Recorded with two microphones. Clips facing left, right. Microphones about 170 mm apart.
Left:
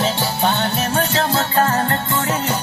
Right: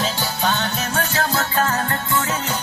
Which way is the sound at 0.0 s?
25° left (ahead or behind).